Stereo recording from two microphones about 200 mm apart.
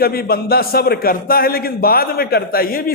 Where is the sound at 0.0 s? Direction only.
50° left (ahead or behind).